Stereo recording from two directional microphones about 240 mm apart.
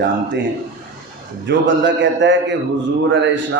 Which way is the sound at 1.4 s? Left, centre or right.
Right.